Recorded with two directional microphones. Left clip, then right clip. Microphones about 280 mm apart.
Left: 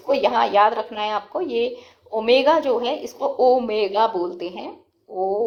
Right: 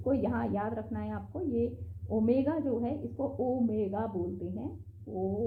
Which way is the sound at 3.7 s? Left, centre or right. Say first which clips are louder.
Left 14 dB; left.